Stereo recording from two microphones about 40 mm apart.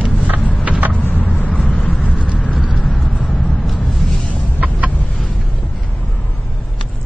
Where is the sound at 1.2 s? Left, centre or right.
Left.